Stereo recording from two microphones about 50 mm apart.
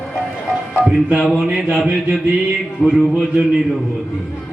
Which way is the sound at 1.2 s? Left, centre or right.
Centre.